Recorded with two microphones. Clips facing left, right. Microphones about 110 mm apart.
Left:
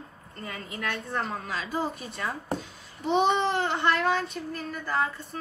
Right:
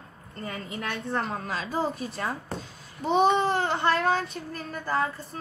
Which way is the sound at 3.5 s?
35° right (ahead or behind).